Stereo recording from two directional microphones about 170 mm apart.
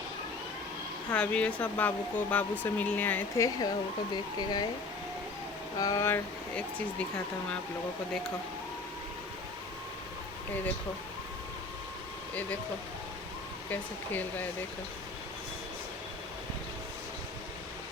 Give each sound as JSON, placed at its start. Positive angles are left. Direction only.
{"t": 1.1, "sound": "speech", "side_deg": 5}
{"t": 5.8, "sound": "speech", "side_deg": 20}
{"t": 12.3, "sound": "speech", "side_deg": 10}
{"t": 13.7, "sound": "speech", "side_deg": 10}